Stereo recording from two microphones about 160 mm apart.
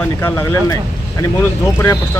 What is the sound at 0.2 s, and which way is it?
Speech, 15° left (ahead or behind).